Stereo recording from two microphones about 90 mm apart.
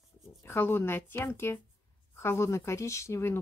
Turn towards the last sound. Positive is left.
turn(degrees=30)  # may be behind; listen again after turning